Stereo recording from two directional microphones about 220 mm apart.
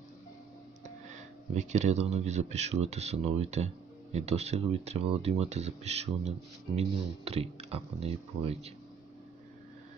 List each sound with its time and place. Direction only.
0.8 s speech: 35° right (ahead or behind)